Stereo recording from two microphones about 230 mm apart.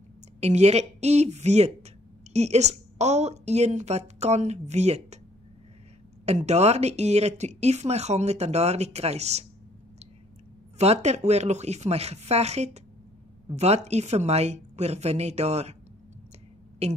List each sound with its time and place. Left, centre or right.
0.4 s speech: right
6.2 s speech: right
10.8 s speech: right
16.8 s speech: right